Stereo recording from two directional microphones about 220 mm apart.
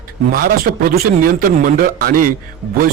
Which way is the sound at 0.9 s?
40° right (ahead or behind).